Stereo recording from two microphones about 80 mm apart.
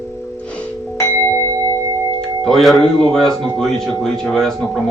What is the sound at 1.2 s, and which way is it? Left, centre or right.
Tubular bells, left.